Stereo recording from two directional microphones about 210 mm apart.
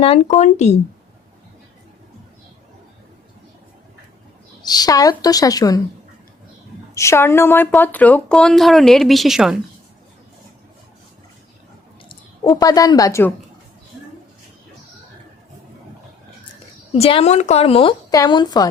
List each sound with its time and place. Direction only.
0.0 s speech: 30° left (ahead or behind)
4.6 s a woman's voice: 20° left (ahead or behind)
6.9 s a woman's voice: 15° left (ahead or behind)
12.0 s speech: 20° left (ahead or behind)
16.9 s a woman's voice: 25° left (ahead or behind)